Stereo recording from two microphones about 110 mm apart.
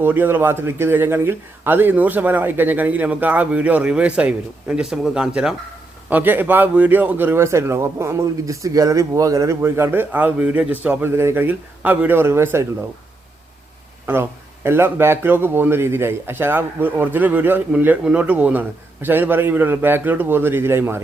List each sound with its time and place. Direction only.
0.0 s speech: 20° right (ahead or behind)
14.1 s speech: 20° right (ahead or behind)